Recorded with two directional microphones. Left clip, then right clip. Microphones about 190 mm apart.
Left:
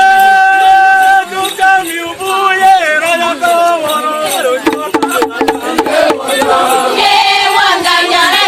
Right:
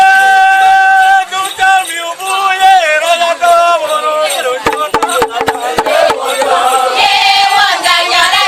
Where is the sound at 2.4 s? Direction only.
45° right (ahead or behind).